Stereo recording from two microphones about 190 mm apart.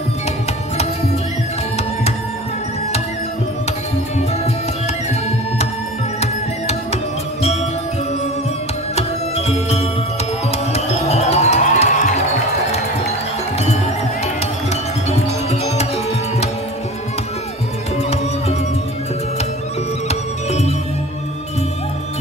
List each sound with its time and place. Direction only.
6.2 s music: 35° left (ahead or behind)
9.5 s music: 35° left (ahead or behind)
14.2 s music: 35° left (ahead or behind)
20.1 s music: 35° left (ahead or behind)